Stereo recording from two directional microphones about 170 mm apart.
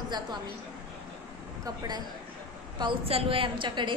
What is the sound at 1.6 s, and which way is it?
A woman's voice, 25° right (ahead or behind).